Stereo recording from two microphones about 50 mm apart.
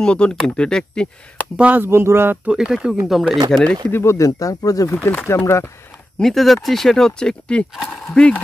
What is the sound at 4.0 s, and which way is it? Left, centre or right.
Speech, left.